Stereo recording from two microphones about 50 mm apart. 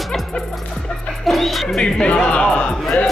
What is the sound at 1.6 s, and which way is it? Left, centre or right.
Speech, centre.